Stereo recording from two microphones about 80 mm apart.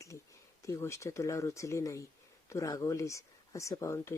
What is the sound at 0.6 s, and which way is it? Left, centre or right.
Speech, left.